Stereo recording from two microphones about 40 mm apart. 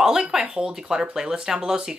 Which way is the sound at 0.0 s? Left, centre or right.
Centre.